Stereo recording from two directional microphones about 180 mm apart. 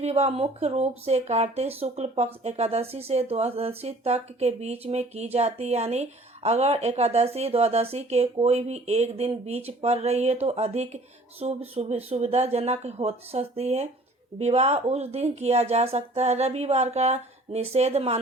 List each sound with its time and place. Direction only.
0.0 s speech: 35° right (ahead or behind)